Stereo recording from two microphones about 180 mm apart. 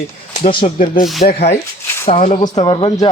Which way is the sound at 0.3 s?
35° left (ahead or behind).